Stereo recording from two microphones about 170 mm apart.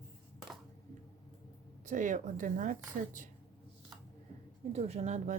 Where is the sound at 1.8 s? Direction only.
45° right (ahead or behind).